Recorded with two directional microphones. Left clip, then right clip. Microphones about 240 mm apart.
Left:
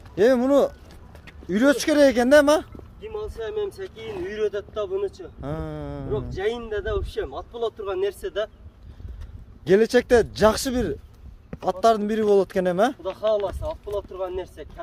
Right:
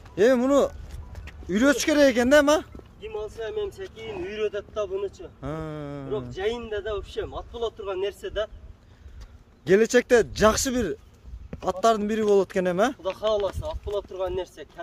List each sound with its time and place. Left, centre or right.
0.1 s a sound: centre
1.5 s speech: centre
5.4 s speech: centre
6.3 s speech: centre
9.7 s speech: centre
13.0 s speech: right
13.9 s speech: right